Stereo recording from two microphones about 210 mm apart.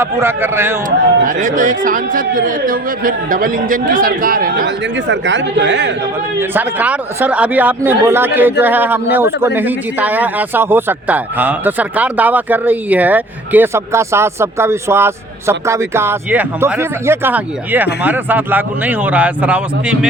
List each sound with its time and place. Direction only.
0.0 s speech: 10° right (ahead or behind)
0.9 s speech: 40° right (ahead or behind); by 5.9 s 55° right (ahead or behind)
6.5 s speech: 10° right (ahead or behind)